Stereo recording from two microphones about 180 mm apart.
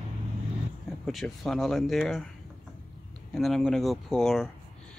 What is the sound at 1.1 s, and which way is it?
Speech, centre (ahead or behind).